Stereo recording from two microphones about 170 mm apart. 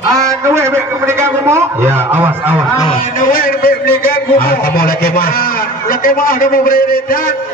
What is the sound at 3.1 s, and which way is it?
A man's voice, 55° left (ahead or behind).